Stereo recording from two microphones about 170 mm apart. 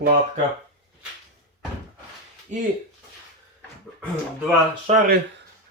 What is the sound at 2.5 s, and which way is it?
Speech, 45° right (ahead or behind).